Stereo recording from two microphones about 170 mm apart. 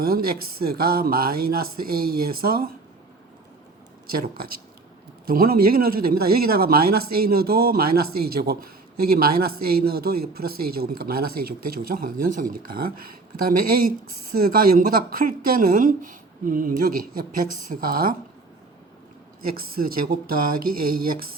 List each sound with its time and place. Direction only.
0.0 s speech: 60° right (ahead or behind)
5.2 s speech: 60° right (ahead or behind)
19.5 s speech: 60° right (ahead or behind)